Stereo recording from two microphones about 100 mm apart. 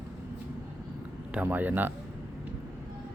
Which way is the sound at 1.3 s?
15° right (ahead or behind).